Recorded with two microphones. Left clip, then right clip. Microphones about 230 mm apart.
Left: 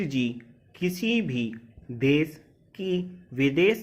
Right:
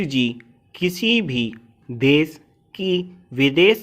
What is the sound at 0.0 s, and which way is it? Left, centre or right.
Speech, right.